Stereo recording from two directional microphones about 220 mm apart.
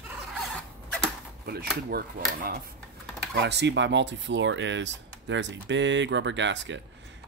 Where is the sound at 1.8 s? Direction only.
40° right (ahead or behind).